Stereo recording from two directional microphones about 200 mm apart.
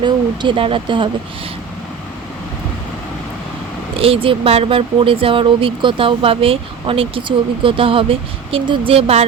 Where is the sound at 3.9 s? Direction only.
30° right (ahead or behind).